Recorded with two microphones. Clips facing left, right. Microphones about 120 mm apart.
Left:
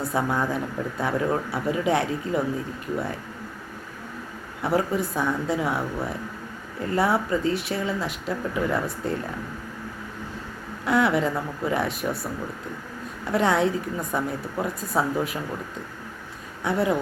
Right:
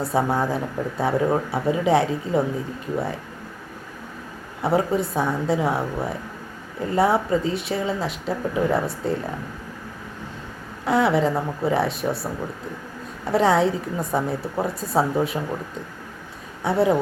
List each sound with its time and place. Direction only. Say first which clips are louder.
0.0 s speech: right 3 dB; 25° right (ahead or behind)
4.6 s speech: right 3 dB; 25° right (ahead or behind)
10.8 s speech: right 2 dB; 25° right (ahead or behind)
16.6 s speech: right 4 dB; 25° right (ahead or behind)